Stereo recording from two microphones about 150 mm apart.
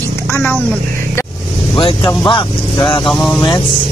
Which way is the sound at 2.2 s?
30° left (ahead or behind).